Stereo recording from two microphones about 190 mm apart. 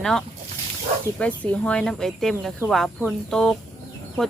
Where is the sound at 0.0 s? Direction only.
Centre (ahead or behind).